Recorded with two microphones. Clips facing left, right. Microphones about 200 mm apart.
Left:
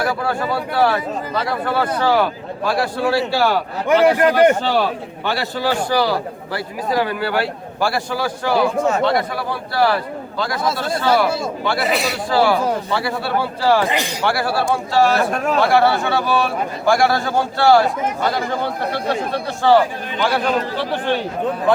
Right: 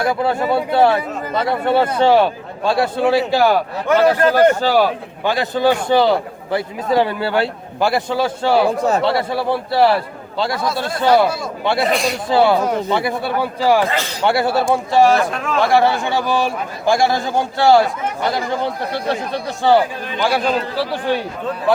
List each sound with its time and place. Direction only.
0.0 s a man's voice: 20° right (ahead or behind)
3.8 s a man's voice: 15° left (ahead or behind)
4.6 s a man's voice: 10° right (ahead or behind); by 10.6 s 25° right (ahead or behind)
11.6 s a man's voice: 25° right (ahead or behind)
11.9 s a man's voice: 5° left (ahead or behind)
12.3 s a man's voice: 20° right (ahead or behind)
13.8 s a man's voice: 15° left (ahead or behind)
14.3 s a man's voice: 25° right (ahead or behind)
20.2 s a man's voice: 10° right (ahead or behind)